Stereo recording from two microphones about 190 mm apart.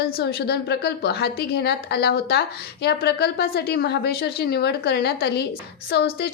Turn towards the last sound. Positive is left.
turn(degrees=60)  # may be behind; listen again after turning